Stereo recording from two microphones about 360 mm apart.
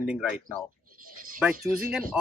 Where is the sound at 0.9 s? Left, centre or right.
Right.